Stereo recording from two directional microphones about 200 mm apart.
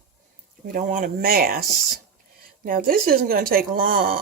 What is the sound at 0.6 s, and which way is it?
Speech, 40° right (ahead or behind).